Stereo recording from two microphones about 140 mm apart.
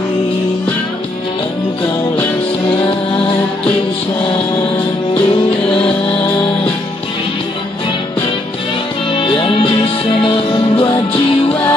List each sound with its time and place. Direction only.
4.2 s music: 40° left (ahead or behind)
9.1 s music: 40° left (ahead or behind)